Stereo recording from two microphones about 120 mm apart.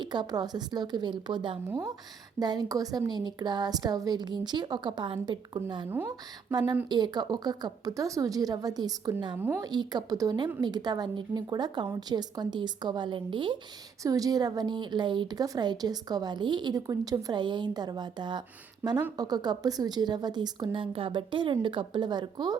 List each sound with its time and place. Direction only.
0.0 s a woman's voice: 40° right (ahead or behind)
1.6 s a woman's voice: 25° right (ahead or behind); by 13.6 s 40° right (ahead or behind)
14.0 s a woman's voice: 30° right (ahead or behind)